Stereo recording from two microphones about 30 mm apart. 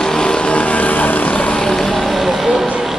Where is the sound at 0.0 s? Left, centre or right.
Left.